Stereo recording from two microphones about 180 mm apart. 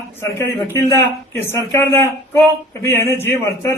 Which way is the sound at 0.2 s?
15° left (ahead or behind).